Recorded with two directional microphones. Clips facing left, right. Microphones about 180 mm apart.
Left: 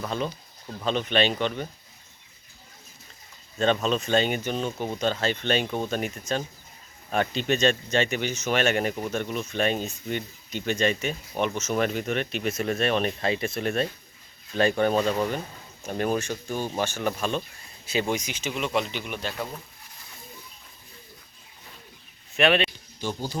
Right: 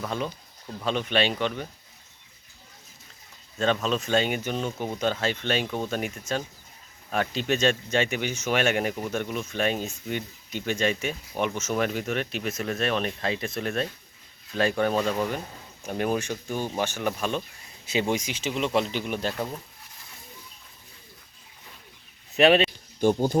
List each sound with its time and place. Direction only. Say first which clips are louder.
0.0 s speech: left 1 dB; 5° right (ahead or behind)
3.8 s speech: left 1 dB; centre (ahead or behind)
5.6 s speech: left 1 dB; 5° left (ahead or behind)
5.9 s speech: left 1 dB; 5° right (ahead or behind)
15.8 s speech: even; 10° right (ahead or behind)
18.1 s speech: right 1 dB; 30° right (ahead or behind)
22.4 s speech: right 3 dB; 35° right (ahead or behind)
23.0 s speech: right 9 dB; 55° right (ahead or behind)